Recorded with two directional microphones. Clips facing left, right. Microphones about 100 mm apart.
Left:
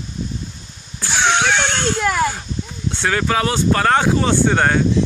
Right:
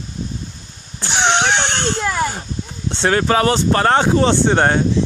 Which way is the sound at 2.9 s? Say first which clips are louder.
Right 3 dB; 25° right (ahead or behind).